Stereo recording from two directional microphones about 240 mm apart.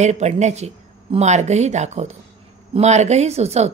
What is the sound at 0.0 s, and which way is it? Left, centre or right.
A woman's voice, right.